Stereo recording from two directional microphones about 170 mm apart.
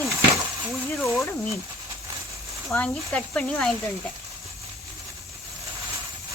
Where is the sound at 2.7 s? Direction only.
5° left (ahead or behind).